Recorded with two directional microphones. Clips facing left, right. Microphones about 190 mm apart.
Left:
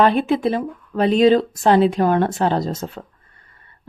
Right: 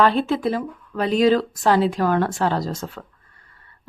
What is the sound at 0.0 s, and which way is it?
Speech, 15° left (ahead or behind).